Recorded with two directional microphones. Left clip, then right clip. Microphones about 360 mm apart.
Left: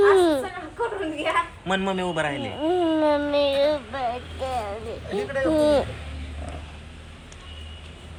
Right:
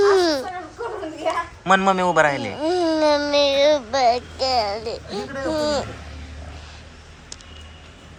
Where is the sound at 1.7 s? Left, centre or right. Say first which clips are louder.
Right 8 dB; centre.